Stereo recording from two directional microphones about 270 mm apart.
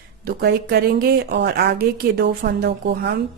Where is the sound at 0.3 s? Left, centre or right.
Right.